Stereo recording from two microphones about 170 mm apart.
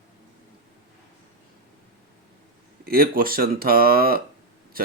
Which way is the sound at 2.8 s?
60° right (ahead or behind).